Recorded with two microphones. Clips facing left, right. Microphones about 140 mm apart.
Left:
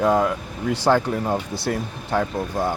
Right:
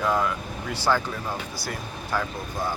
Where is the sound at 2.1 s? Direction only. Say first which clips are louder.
Left 6 dB; 60° left (ahead or behind).